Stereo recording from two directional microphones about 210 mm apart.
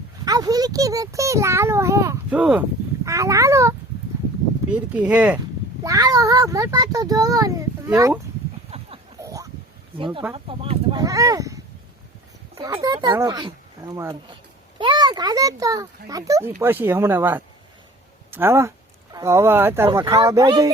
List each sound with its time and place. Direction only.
0.3 s a child's voice: 20° right (ahead or behind)
5.8 s a child's voice: 15° right (ahead or behind)
8.7 s a sound: 30° right (ahead or behind)
9.2 s a sound: 15° right (ahead or behind)
10.0 s speech: 25° right (ahead or behind)
11.0 s a child's voice: 15° right (ahead or behind)